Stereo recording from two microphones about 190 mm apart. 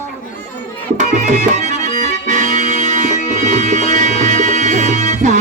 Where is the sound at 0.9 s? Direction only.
40° right (ahead or behind).